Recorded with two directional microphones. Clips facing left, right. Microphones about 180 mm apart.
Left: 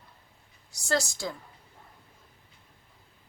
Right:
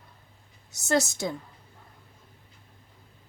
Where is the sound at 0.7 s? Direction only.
20° right (ahead or behind).